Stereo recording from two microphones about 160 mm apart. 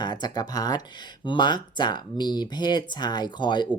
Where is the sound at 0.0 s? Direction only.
25° left (ahead or behind).